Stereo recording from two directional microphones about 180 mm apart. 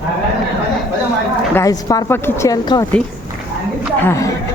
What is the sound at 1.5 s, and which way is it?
Speech, 20° left (ahead or behind).